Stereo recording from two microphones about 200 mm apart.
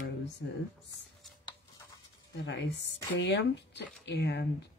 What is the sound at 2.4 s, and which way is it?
Speech, 65° left (ahead or behind).